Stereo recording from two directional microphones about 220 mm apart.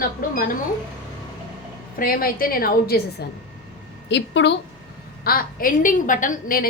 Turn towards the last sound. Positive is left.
turn(degrees=40)  # may be behind; listen again after turning